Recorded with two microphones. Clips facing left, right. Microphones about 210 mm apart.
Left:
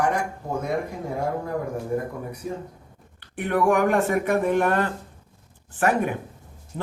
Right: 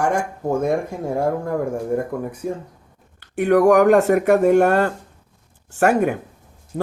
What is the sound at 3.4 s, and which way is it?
Speech, 80° right.